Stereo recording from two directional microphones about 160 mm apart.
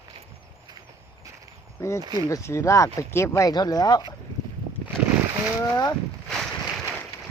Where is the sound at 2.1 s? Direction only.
20° left (ahead or behind).